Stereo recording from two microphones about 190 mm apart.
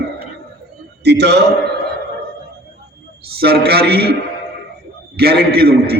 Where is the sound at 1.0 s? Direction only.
60° right (ahead or behind).